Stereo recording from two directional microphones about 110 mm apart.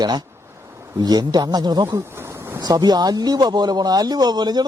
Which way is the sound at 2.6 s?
35° right (ahead or behind).